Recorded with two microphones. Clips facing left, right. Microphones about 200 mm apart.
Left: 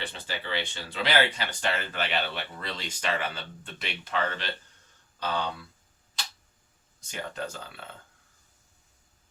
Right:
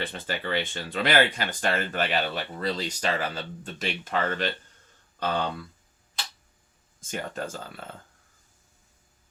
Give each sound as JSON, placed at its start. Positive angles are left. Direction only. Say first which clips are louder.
{"t": 0.0, "sound": "speech", "louder": "right 5 dB", "side_deg": -50}
{"t": 7.0, "sound": "speech", "louder": "right 3 dB", "side_deg": -45}